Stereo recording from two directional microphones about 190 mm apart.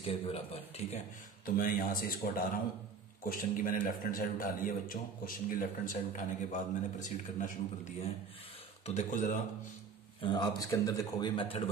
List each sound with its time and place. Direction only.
0.0 s speech: 30° left (ahead or behind)
1.4 s a man's voice: 50° left (ahead or behind)
3.3 s a man's voice: 45° left (ahead or behind)
10.2 s a man's voice: 20° left (ahead or behind)